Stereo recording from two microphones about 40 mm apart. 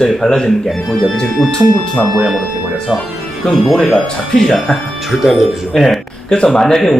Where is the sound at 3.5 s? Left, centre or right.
Centre.